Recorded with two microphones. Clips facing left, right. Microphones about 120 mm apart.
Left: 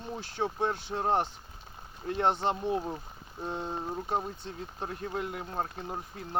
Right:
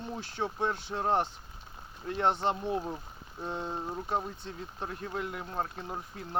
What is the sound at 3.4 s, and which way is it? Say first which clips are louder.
Speech: left 1 dB; 30° left (ahead or behind).